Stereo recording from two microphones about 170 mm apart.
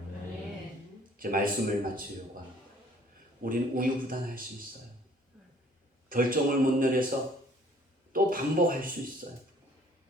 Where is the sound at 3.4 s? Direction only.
55° right (ahead or behind).